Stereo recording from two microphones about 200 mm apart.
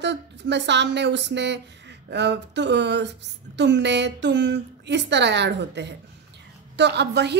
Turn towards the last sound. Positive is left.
turn(degrees=-55)  # may be behind; listen again after turning